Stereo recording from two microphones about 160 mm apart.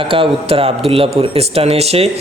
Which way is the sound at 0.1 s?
35° right (ahead or behind).